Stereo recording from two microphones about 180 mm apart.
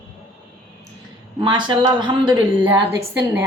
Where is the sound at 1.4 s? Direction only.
25° right (ahead or behind).